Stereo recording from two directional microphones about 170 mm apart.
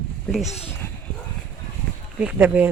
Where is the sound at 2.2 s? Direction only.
10° right (ahead or behind).